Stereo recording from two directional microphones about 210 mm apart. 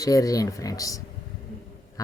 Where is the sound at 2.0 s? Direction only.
15° left (ahead or behind).